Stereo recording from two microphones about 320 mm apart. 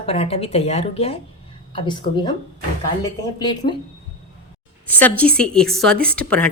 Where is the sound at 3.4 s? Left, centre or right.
Centre.